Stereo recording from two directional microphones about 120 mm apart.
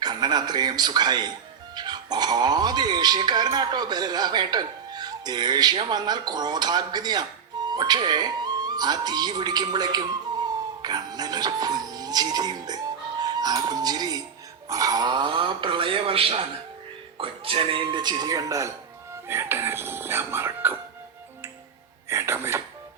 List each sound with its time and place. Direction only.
0.0 s speech: 35° right (ahead or behind); by 20.7 s 20° right (ahead or behind)
22.1 s speech: 20° right (ahead or behind)